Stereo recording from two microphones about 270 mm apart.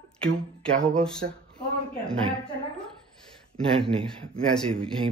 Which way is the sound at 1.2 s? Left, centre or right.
Right.